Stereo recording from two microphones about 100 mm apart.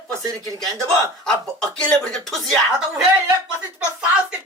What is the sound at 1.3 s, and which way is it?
A woman's voice, 10° left (ahead or behind).